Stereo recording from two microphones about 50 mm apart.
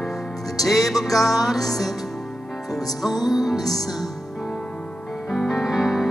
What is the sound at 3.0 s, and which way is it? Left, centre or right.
Music, centre.